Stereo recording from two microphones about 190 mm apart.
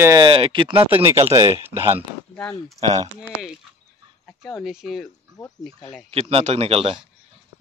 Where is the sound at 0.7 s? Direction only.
10° right (ahead or behind).